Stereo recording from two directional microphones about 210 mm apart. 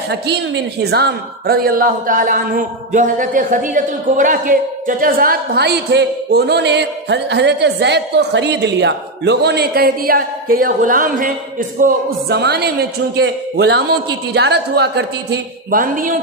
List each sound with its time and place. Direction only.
0.8 s a man's voice: 50° right (ahead or behind)